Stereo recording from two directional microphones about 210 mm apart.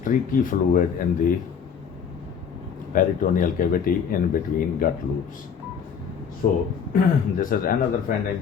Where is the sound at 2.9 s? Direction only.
40° left (ahead or behind).